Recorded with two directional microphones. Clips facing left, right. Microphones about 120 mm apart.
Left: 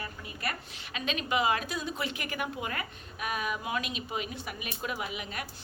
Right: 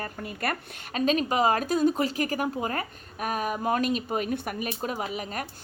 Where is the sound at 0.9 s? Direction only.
40° right (ahead or behind).